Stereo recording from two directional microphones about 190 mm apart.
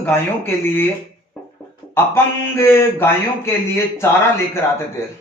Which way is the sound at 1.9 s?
10° left (ahead or behind).